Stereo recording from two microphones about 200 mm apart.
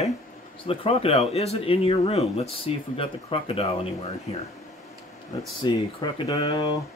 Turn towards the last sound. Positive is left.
turn(degrees=20)  # may be behind; listen again after turning